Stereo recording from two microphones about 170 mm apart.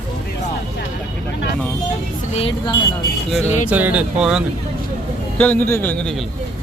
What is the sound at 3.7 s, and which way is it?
Speech, 10° right (ahead or behind).